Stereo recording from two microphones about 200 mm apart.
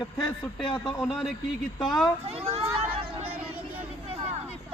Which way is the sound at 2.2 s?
30° right (ahead or behind).